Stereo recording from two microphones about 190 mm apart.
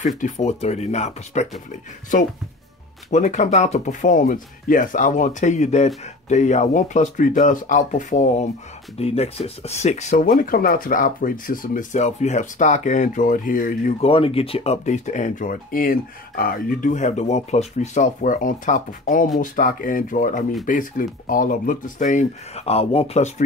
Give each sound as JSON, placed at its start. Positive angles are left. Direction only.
{"t": 0.2, "sound": "speech", "side_deg": 35}
{"t": 3.1, "sound": "speech", "side_deg": 40}
{"t": 14.1, "sound": "speech", "side_deg": 30}